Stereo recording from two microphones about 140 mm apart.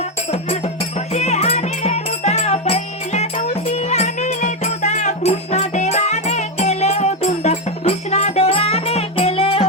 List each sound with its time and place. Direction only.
0.0 s music: 50° left (ahead or behind)